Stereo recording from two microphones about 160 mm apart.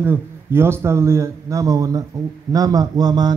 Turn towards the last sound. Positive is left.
turn(degrees=-25)  # may be behind; listen again after turning